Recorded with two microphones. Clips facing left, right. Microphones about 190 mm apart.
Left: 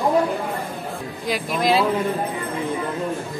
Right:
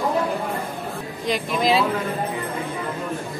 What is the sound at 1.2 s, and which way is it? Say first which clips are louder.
Speech: even; centre (ahead or behind).